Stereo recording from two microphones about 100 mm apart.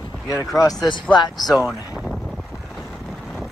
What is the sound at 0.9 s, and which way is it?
Speech, 50° left (ahead or behind).